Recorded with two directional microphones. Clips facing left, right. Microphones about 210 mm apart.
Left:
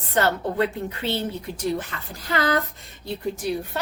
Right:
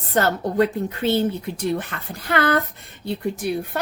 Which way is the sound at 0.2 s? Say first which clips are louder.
Right 3 dB; 45° right (ahead or behind).